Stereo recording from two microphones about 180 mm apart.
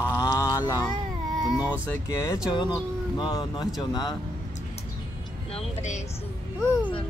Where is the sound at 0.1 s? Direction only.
15° left (ahead or behind).